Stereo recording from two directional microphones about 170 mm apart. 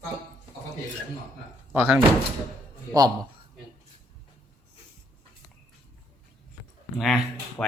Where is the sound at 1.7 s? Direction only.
10° right (ahead or behind).